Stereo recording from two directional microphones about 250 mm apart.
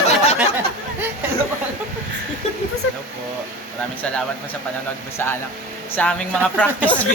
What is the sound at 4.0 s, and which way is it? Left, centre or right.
Speech, centre.